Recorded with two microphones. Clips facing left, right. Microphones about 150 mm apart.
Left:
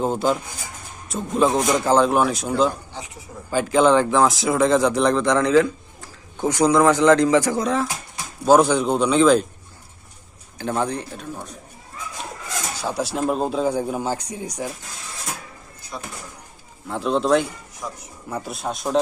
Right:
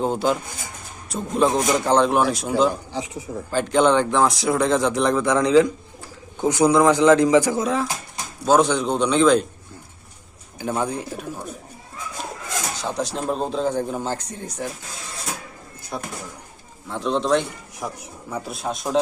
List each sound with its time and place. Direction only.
0.0 s a man's voice: centre (ahead or behind)
8.4 s a man's voice: 10° left (ahead or behind)
10.6 s a man's voice: 10° right (ahead or behind)
12.7 s a man's voice: 10° left (ahead or behind)
16.9 s a man's voice: 5° left (ahead or behind)
17.8 s speech: 50° right (ahead or behind)
18.3 s a man's voice: centre (ahead or behind)